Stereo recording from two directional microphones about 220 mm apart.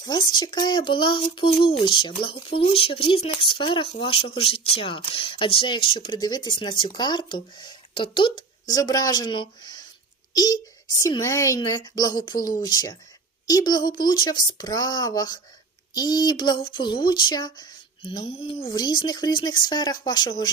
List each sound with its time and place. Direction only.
0.0 s a woman's voice: 20° left (ahead or behind)